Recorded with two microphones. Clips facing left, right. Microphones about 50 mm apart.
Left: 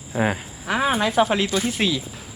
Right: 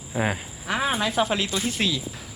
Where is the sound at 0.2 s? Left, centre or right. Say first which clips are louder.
Left 3 dB; centre.